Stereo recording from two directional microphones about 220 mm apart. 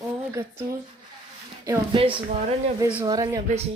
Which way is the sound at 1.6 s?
20° right (ahead or behind).